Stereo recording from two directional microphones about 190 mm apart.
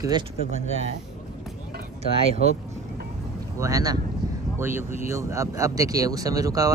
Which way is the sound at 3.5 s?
15° right (ahead or behind).